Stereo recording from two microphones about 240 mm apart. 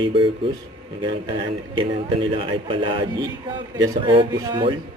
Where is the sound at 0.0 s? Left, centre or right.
Right.